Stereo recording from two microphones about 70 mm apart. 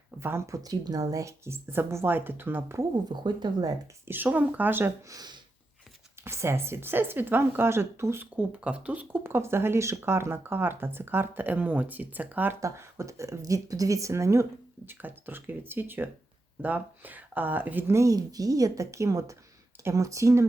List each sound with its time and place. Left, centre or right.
0.2 s speech: right
0.5 s speech: right
1.6 s speech: right
3.1 s speech: right
4.1 s speech: right
5.0 s speech: right
6.2 s speech: right
8.2 s speech: centre
9.2 s speech: right
12.5 s speech: right
14.8 s speech: right
17.9 s speech: right